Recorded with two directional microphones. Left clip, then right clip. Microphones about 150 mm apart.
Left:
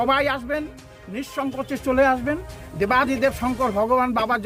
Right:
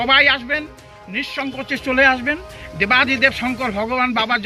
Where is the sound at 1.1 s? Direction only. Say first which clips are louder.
Right 4 dB; 25° left (ahead or behind).